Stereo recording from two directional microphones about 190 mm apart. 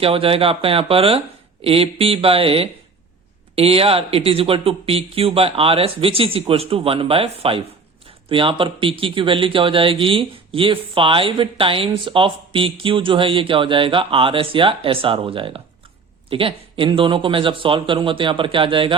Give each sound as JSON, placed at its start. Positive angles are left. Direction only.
{"t": 0.0, "sound": "speech", "side_deg": -30}